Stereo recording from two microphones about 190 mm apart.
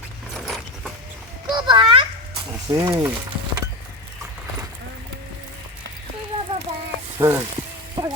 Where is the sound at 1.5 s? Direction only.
25° right (ahead or behind).